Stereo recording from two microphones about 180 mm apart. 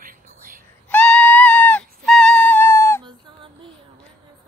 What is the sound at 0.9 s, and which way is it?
Music, 5° left (ahead or behind).